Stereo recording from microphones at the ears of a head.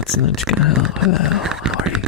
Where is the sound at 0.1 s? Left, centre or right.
Left.